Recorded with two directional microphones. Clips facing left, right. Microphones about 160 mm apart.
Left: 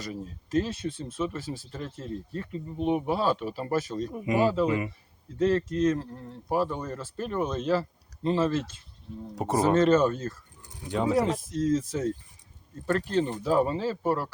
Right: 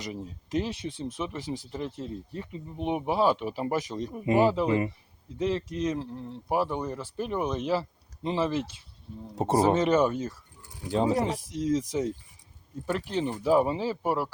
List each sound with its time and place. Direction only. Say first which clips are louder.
0.0 s speech: even; 15° right (ahead or behind)
9.3 s speech: right 3 dB; 25° right (ahead or behind)
9.6 s speech: left 1 dB; 10° right (ahead or behind)
10.9 s speech: right 1 dB; 35° right (ahead or behind)
11.3 s speech: left 2 dB; 10° right (ahead or behind)